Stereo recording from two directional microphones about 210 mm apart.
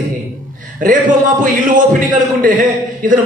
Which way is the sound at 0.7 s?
40° right (ahead or behind).